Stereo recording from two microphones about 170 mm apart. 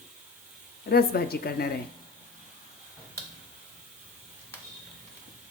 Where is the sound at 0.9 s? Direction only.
65° left (ahead or behind).